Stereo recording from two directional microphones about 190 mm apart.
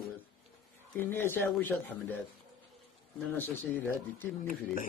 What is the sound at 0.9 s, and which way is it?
Speech, 10° left (ahead or behind).